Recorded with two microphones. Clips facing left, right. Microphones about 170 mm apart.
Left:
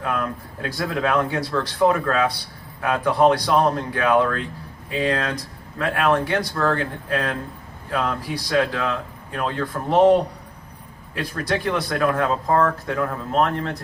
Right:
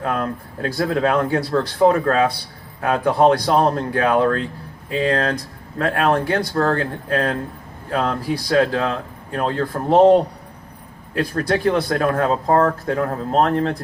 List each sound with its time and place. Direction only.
0.0 s speech: 35° right (ahead or behind)
11.1 s speech: 40° right (ahead or behind)